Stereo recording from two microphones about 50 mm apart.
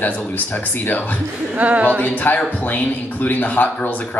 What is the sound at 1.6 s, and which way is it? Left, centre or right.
Speech, right.